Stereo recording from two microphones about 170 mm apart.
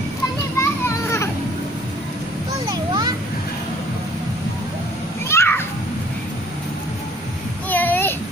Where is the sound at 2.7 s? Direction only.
25° right (ahead or behind).